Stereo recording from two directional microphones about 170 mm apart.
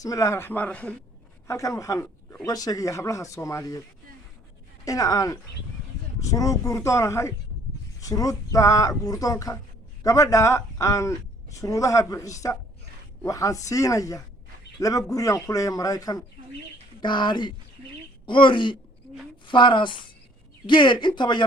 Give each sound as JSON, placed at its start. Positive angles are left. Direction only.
{"t": 0.0, "sound": "speech", "side_deg": 20}
{"t": 1.5, "sound": "speech", "side_deg": 20}
{"t": 4.9, "sound": "speech", "side_deg": 20}